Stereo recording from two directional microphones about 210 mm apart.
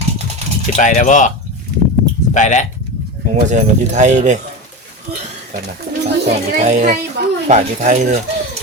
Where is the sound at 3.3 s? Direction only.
35° right (ahead or behind).